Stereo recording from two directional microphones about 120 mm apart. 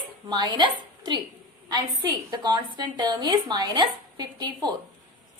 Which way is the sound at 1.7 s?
35° right (ahead or behind).